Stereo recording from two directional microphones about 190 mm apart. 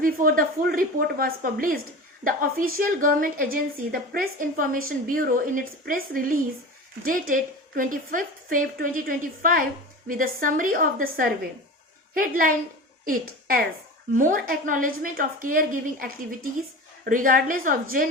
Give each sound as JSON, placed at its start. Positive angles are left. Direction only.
{"t": 0.0, "sound": "a woman's voice", "side_deg": -50}